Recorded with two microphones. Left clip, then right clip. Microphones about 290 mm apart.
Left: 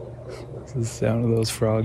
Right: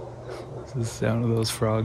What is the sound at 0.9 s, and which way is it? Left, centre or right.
Speech, centre.